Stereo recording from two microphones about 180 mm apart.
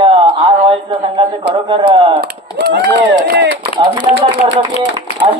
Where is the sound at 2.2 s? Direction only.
65° right (ahead or behind).